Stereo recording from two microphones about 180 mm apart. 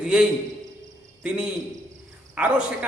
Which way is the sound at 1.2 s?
5° right (ahead or behind).